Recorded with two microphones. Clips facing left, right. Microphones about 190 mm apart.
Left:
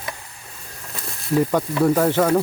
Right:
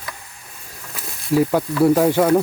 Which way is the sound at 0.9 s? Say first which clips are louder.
Right 2 dB; 5° right (ahead or behind).